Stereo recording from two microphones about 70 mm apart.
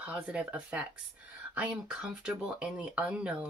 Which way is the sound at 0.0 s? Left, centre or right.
Right.